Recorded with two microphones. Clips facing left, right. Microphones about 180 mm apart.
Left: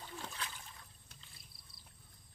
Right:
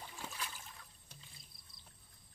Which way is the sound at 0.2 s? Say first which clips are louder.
Right 2 dB; 10° right (ahead or behind).